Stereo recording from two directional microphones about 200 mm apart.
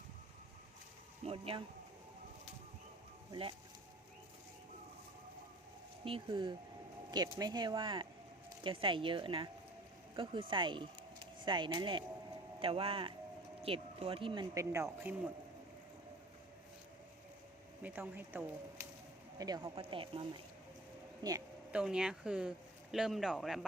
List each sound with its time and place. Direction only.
1.2 s speech: 30° right (ahead or behind)
6.1 s speech: 25° right (ahead or behind)
10.5 s speech: 25° right (ahead or behind)
17.8 s speech: 10° right (ahead or behind)
21.7 s speech: 5° right (ahead or behind)